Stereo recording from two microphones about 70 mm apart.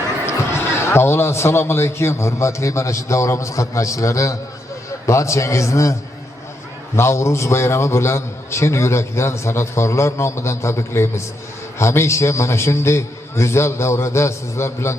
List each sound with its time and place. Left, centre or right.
0.3 s a man's voice: left